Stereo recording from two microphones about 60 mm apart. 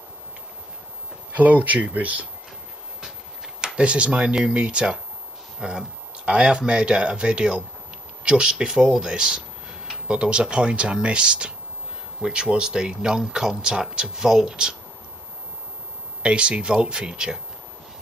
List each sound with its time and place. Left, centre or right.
1.3 s speech: right
3.6 s speech: centre
16.2 s speech: centre